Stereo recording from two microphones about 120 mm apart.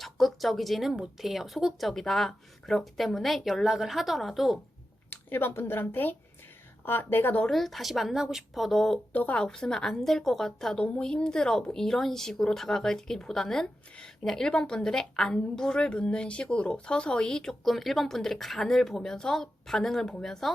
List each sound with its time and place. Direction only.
0.0 s a woman's voice: centre (ahead or behind)
5.1 s speech: 20° left (ahead or behind)
7.5 s a woman's voice: centre (ahead or behind)